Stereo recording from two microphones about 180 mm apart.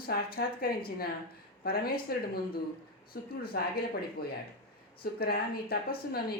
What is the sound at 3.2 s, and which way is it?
Speech, 60° left (ahead or behind).